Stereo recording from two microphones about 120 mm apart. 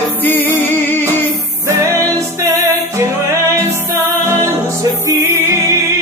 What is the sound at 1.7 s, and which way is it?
Music, 25° right (ahead or behind).